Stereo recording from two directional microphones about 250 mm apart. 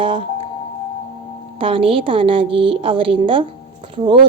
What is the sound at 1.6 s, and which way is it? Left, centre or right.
A woman's voice, right.